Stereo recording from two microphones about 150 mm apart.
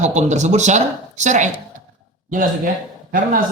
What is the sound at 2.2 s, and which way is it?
Speech, 65° right (ahead or behind).